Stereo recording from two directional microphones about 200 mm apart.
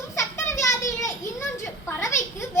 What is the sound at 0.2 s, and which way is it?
Children playing, 15° left (ahead or behind).